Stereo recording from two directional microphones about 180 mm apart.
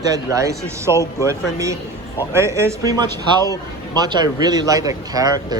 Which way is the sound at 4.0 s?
20° right (ahead or behind).